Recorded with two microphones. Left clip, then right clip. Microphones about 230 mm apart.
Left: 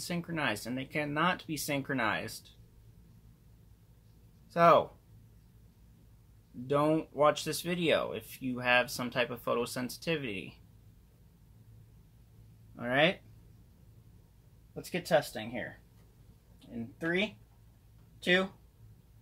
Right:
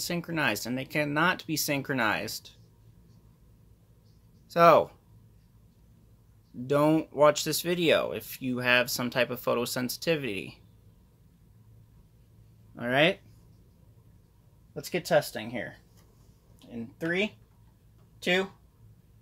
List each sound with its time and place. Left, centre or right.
0.0 s speech: right
4.5 s speech: right
6.7 s speech: right
12.7 s speech: right
14.7 s speech: right